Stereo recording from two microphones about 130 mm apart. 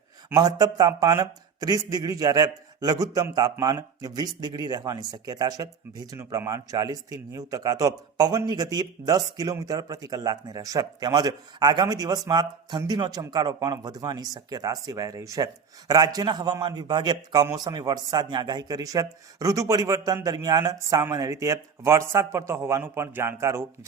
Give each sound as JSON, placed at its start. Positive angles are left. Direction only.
{"t": 0.3, "sound": "speech", "side_deg": -30}